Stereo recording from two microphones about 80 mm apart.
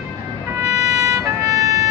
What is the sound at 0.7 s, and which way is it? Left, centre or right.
Emergency vehicle, right.